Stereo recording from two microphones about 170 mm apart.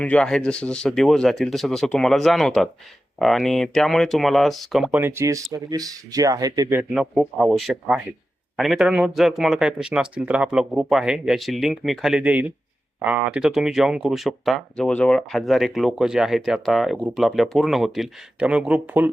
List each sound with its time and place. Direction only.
0.0 s speech: 5° left (ahead or behind)
4.9 s speech: 15° right (ahead or behind)
6.9 s speech: centre (ahead or behind)